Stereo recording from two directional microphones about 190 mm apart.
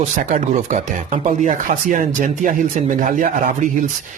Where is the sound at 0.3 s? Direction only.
40° right (ahead or behind).